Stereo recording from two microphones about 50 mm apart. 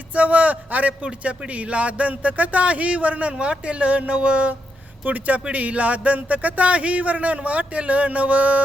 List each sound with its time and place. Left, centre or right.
0.1 s a man's voice: right